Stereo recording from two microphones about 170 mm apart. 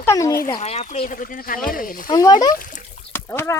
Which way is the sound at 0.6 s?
45° left (ahead or behind).